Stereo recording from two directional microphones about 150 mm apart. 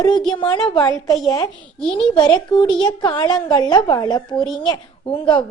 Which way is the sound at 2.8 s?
30° left (ahead or behind).